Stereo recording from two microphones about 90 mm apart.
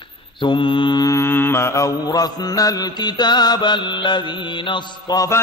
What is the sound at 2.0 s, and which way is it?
Mantra, 45° left (ahead or behind).